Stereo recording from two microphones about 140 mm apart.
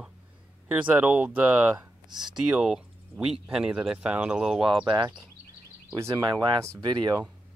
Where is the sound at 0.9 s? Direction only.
10° right (ahead or behind).